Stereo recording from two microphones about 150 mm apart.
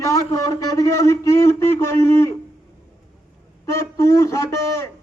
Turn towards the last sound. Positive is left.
turn(degrees=20)  # may be behind; listen again after turning